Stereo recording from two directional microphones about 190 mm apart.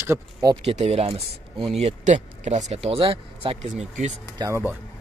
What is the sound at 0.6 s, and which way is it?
Speech, 35° right (ahead or behind).